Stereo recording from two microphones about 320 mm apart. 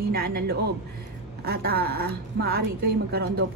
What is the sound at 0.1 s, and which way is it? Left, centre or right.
Speech, right.